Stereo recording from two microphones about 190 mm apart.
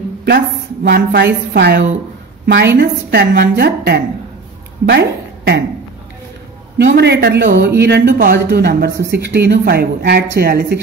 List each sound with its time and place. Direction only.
0.8 s a woman's voice: 55° right (ahead or behind)
6.8 s a woman's voice: 60° right (ahead or behind)